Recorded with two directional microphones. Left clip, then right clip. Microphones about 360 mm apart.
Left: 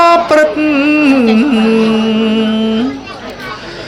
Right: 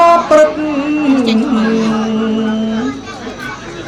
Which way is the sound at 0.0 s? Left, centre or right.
Left.